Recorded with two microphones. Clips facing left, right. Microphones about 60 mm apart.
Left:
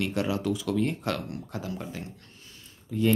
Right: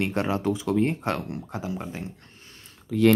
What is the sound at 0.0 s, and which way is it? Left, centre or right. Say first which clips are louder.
Speech: right 3 dB; right.